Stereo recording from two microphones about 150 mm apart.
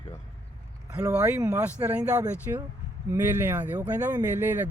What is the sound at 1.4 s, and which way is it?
Speech, 20° right (ahead or behind).